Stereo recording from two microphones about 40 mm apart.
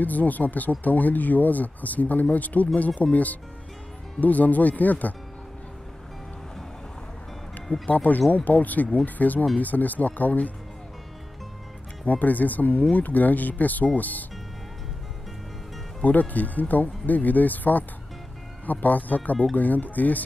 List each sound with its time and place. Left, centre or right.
0.0 s speech: left
7.8 s speech: left
12.1 s speech: left
16.0 s speech: left